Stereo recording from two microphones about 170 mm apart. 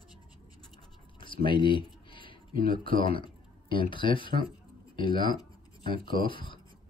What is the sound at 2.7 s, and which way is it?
Speech, 30° left (ahead or behind).